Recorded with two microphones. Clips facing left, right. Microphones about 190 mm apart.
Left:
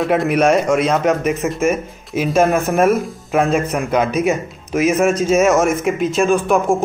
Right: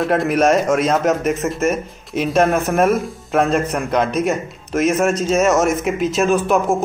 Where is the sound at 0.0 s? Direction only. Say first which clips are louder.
Left 1 dB; centre (ahead or behind).